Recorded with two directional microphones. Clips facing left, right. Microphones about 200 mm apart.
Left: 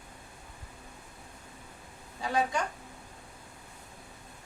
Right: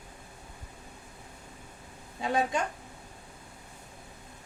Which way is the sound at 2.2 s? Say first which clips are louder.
Right 1 dB; 20° right (ahead or behind).